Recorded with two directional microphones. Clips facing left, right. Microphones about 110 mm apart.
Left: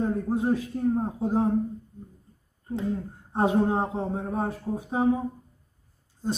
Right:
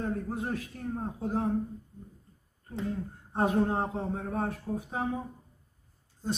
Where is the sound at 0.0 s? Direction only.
20° left (ahead or behind).